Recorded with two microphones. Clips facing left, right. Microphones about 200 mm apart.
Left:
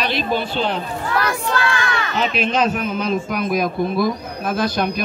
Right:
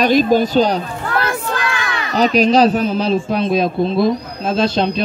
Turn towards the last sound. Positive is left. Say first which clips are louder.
# right 4 dB
turn(degrees=-25)  # may be behind; listen again after turning